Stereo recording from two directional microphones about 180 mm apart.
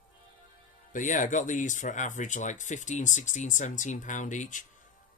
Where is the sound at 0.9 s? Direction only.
45° left (ahead or behind).